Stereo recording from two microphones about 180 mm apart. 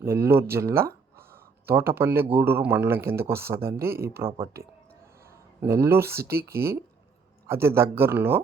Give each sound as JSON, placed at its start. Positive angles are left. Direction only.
{"t": 0.0, "sound": "speech", "side_deg": -15}
{"t": 5.5, "sound": "speech", "side_deg": -15}
{"t": 6.1, "sound": "speech", "side_deg": -60}
{"t": 7.4, "sound": "speech", "side_deg": -15}